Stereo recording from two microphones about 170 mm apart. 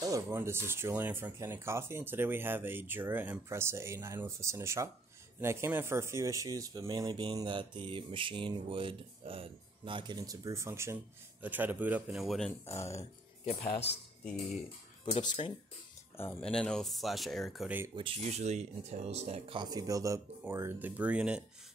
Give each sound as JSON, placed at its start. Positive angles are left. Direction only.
{"t": 0.0, "sound": "speech", "side_deg": -15}
{"t": 14.2, "sound": "speech", "side_deg": 5}
{"t": 16.2, "sound": "speech", "side_deg": 10}
{"t": 17.6, "sound": "speech", "side_deg": -10}
{"t": 17.9, "sound": "speech", "side_deg": -35}